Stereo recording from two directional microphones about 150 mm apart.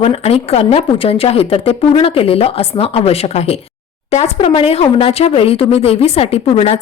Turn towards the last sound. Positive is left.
turn(degrees=40)  # may be behind; listen again after turning